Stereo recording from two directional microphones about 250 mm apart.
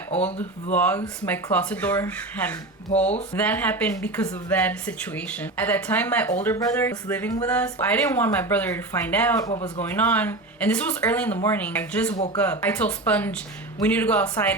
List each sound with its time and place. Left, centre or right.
0.7 s a woman's voice: centre
9.5 s a man's voice: left
9.8 s a woman's voice: centre
12.1 s a man's voice: left
12.4 s a woman's voice: centre